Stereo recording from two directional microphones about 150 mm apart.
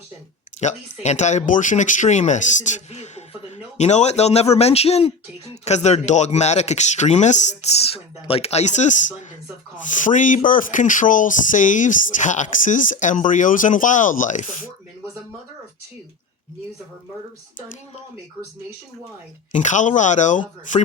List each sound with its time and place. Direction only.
0.6 s speech: 50° left (ahead or behind)
19.5 s speech: 55° left (ahead or behind)